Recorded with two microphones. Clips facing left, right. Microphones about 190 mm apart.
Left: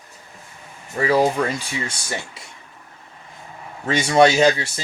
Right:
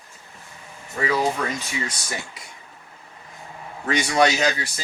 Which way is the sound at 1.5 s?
30° left (ahead or behind).